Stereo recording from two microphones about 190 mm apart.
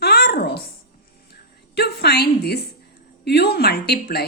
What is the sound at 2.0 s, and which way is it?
Speech, 60° left (ahead or behind).